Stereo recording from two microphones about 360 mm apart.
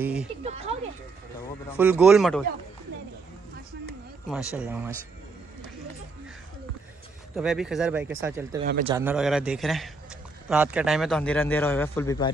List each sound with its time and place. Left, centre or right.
0.0 s a man's voice: centre
0.4 s a sound: centre
1.8 s a man's voice: centre
4.5 s a man's voice: centre
7.3 s a man's voice: centre
8.6 s a man's voice: right
8.9 s a man's voice: centre